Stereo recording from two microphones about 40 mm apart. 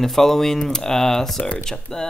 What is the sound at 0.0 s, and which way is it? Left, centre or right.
Speech, centre.